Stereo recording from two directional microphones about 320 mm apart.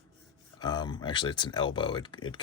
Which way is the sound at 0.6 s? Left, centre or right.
Centre.